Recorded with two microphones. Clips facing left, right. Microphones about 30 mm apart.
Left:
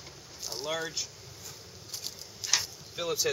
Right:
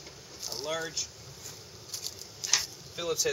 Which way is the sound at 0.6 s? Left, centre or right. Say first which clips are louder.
Even; centre.